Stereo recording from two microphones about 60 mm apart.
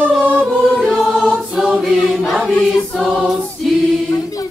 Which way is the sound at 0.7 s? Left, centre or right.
Centre.